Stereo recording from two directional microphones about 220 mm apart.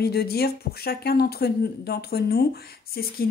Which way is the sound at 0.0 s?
45° left (ahead or behind).